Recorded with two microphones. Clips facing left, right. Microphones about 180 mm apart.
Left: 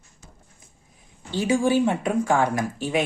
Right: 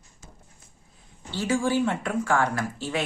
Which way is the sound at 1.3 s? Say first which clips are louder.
Left 4 dB; 15° left (ahead or behind).